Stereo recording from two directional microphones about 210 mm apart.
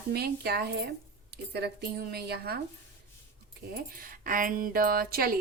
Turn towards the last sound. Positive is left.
turn(degrees=-45)  # may be behind; listen again after turning